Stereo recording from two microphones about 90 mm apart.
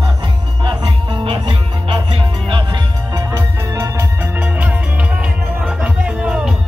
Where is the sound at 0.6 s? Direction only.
65° right (ahead or behind); by 2.6 s 85° right.